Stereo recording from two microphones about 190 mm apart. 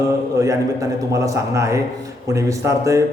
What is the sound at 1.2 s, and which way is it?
A man's voice, 15° right (ahead or behind).